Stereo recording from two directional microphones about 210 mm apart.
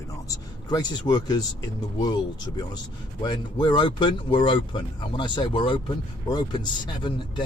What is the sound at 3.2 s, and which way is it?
Speech, 20° left (ahead or behind).